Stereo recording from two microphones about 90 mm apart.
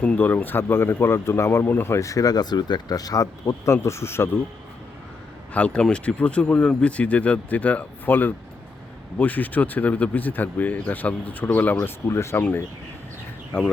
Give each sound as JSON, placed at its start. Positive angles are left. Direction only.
{"t": 0.0, "sound": "speech", "side_deg": 15}
{"t": 5.5, "sound": "speech", "side_deg": 10}
{"t": 12.0, "sound": "speech", "side_deg": 30}
{"t": 12.4, "sound": "speech", "side_deg": 20}